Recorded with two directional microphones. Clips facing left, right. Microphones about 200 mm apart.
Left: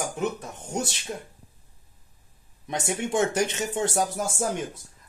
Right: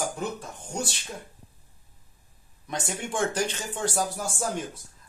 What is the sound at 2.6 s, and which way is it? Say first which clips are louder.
Speech: left 4 dB; 25° left (ahead or behind).